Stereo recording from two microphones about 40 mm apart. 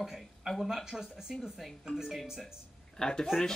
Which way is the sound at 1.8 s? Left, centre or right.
Centre.